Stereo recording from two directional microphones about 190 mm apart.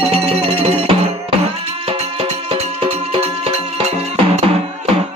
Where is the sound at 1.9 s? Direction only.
35° right (ahead or behind).